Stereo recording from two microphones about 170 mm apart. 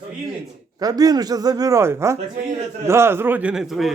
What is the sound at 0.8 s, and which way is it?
A man's voice, 20° right (ahead or behind).